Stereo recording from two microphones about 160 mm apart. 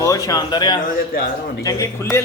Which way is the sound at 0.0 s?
20° left (ahead or behind).